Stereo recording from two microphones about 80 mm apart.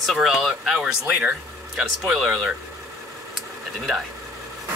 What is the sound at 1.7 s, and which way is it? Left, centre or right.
Speech, centre.